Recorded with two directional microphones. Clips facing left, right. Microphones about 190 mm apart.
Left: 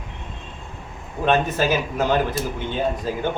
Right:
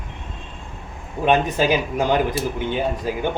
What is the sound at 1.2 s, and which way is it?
Speech, 15° right (ahead or behind).